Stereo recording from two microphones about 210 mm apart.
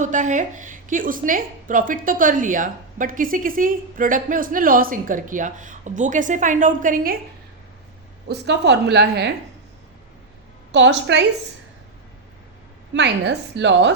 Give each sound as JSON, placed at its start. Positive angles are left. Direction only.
{"t": 0.0, "sound": "a woman's voice", "side_deg": -35}
{"t": 8.3, "sound": "a woman's voice", "side_deg": -55}
{"t": 10.7, "sound": "a woman's voice", "side_deg": -60}
{"t": 12.9, "sound": "a woman's voice", "side_deg": -55}